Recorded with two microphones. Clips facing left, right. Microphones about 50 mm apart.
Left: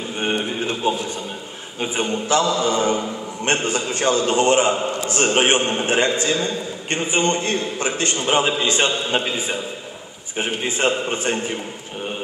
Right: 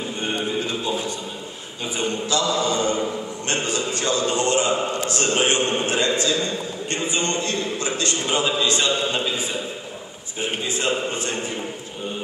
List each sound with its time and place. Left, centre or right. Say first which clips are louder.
0.2 s a sound: left 3 dB; left
2.0 s mantra: left 3 dB; left
3.4 s a man's voice: left 4 dB; left